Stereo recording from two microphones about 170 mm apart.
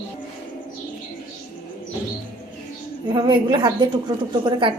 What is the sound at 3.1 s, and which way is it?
Speech, 25° right (ahead or behind).